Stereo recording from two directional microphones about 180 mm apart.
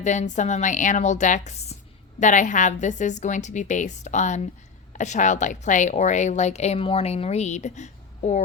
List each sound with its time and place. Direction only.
0.0 s a woman's voice: 40° left (ahead or behind)